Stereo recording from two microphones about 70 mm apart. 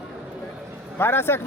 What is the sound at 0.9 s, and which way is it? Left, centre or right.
Speech, left.